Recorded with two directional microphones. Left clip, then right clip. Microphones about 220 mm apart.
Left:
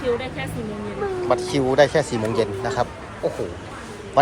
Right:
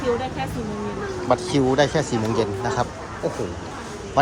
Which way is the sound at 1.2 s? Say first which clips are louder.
Right 1 dB; 20° right (ahead or behind).